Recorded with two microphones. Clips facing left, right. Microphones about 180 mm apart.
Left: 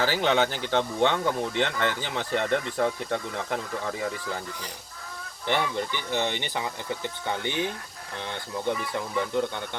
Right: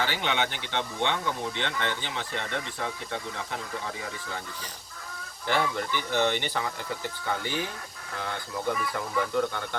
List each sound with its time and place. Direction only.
0.0 s speech: 40° left (ahead or behind)
5.5 s speech: 20° left (ahead or behind)